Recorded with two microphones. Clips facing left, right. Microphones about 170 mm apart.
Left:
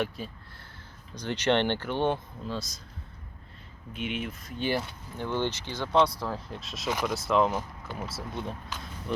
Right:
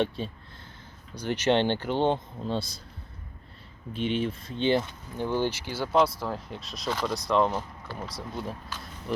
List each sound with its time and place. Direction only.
0.2 s speech: 30° right (ahead or behind)
1.1 s speech: 10° right (ahead or behind); by 2.8 s 30° right (ahead or behind)
3.9 s speech: 30° right (ahead or behind); by 9.2 s 5° right (ahead or behind)